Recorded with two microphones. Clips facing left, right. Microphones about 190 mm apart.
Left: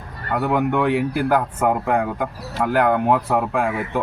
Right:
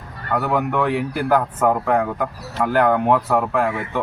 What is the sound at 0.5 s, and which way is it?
Speech, 5° left (ahead or behind).